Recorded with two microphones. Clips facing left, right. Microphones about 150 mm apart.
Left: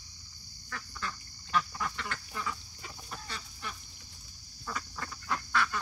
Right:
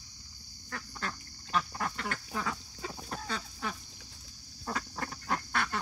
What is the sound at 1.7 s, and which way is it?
Duck, 40° right (ahead or behind).